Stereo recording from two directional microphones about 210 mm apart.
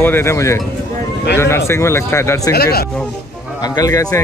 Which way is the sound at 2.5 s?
50° left (ahead or behind).